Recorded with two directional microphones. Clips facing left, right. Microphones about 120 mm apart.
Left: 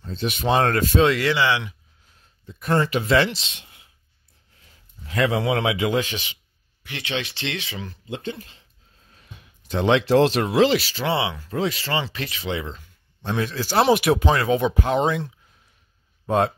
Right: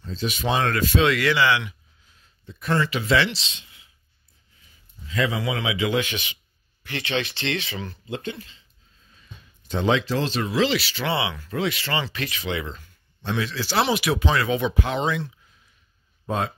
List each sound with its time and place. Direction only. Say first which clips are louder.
0.1 s speech: left 3 dB; 55° left (ahead or behind); by 1.8 s 30° left (ahead or behind)
2.7 s speech: left 2 dB; 45° left (ahead or behind)
4.6 s a man's voice: left 1 dB; 65° left (ahead or behind); by 6.3 s 30° left (ahead or behind)
6.9 s speech: right 2 dB; 10° left (ahead or behind)
8.4 s speech: even; 55° left (ahead or behind)
9.1 s speech: left 1 dB; 70° left (ahead or behind); by 12.8 s 30° left (ahead or behind)
13.2 s speech: left 2 dB; 45° left (ahead or behind)
16.3 s speech: left 6 dB; 65° left (ahead or behind)